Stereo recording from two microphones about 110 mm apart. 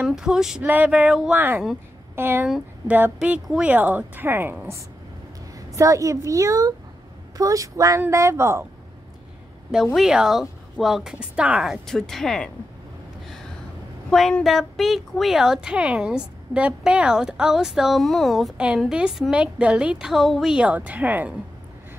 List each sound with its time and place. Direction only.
0.0 s a woman's voice: 5° right (ahead or behind)
1.3 s a woman's voice: 20° right (ahead or behind)
2.4 s a woman's voice: 5° right (ahead or behind)
5.8 s speech: 30° right (ahead or behind)
9.9 s a woman's voice: 5° right (ahead or behind)
14.4 s a woman's voice: centre (ahead or behind)